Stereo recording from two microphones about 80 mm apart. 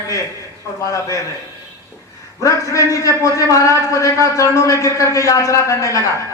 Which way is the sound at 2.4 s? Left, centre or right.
Left.